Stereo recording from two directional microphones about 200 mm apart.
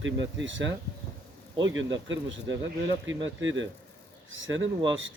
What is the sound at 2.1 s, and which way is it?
Speech, 70° right (ahead or behind).